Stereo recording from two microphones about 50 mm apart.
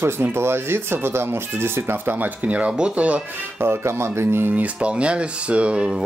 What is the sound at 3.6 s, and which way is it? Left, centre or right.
Speech, right.